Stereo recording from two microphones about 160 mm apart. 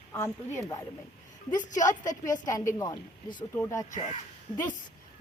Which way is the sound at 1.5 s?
50° left (ahead or behind).